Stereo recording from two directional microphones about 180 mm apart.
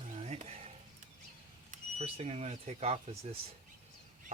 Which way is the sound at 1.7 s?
35° right (ahead or behind).